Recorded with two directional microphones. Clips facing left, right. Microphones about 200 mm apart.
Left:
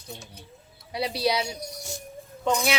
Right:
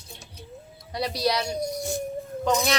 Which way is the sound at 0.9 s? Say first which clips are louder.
Even; 5° left (ahead or behind).